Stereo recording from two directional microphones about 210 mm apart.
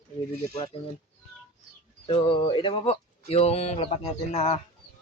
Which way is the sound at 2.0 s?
25° left (ahead or behind).